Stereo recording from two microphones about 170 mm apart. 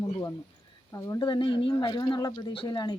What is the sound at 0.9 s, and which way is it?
Speech, 20° left (ahead or behind).